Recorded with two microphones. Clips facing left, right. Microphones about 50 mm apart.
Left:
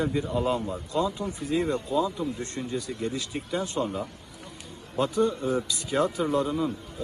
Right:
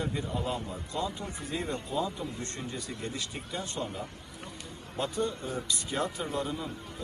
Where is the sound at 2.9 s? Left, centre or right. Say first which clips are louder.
Left 6 dB; left.